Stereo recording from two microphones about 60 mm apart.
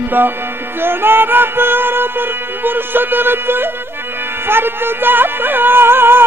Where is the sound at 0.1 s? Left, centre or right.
Right.